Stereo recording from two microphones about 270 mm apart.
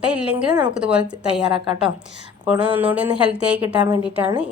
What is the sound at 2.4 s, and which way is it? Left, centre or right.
A woman's voice, centre.